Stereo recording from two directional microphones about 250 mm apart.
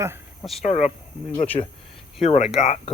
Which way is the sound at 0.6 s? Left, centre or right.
Left.